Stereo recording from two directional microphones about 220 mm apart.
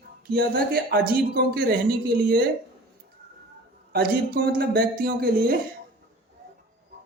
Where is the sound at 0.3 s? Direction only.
45° right (ahead or behind).